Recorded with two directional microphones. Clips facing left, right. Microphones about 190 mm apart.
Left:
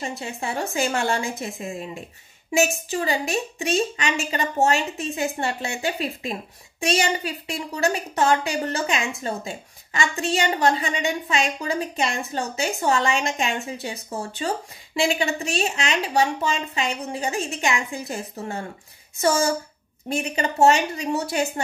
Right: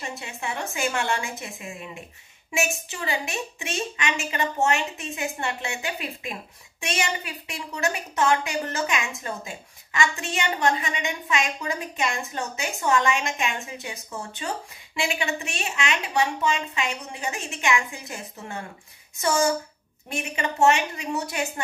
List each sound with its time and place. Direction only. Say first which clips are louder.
0.0 s a woman's voice: left 4 dB; 35° left (ahead or behind)
20.1 s a woman's voice: left 4 dB; 35° left (ahead or behind)